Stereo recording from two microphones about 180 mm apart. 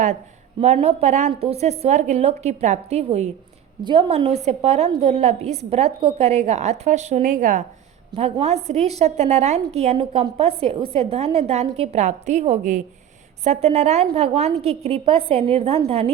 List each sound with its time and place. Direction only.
0.6 s a woman's voice: 35° right (ahead or behind)